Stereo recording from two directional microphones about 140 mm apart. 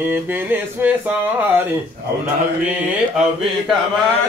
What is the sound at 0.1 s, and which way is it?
Music, 15° right (ahead or behind).